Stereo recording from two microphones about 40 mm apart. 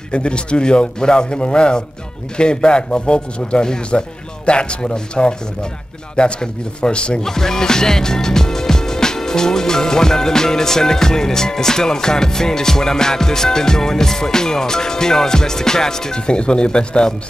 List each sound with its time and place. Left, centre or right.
0.1 s a man's voice: left
7.2 s music: centre